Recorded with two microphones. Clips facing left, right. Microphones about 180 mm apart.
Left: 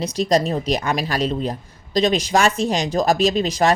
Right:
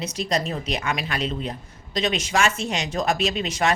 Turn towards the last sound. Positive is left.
turn(degrees=35)  # may be behind; listen again after turning